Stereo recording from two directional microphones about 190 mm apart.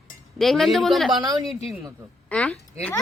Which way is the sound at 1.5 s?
30° left (ahead or behind).